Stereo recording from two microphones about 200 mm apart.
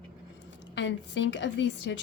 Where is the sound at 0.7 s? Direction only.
65° left (ahead or behind).